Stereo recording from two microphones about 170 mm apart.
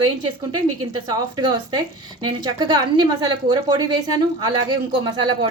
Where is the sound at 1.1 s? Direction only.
25° right (ahead or behind).